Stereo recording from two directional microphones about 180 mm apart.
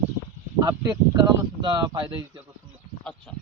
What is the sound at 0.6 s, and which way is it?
Speech, 20° right (ahead or behind).